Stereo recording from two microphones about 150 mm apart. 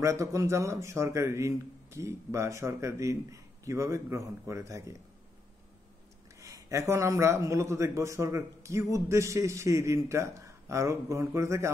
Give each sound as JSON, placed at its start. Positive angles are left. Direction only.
{"t": 0.0, "sound": "a man's voice", "side_deg": -20}
{"t": 6.4, "sound": "a man's voice", "side_deg": -20}